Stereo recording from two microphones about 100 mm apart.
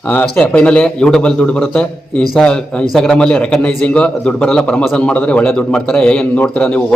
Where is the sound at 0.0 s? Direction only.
15° left (ahead or behind).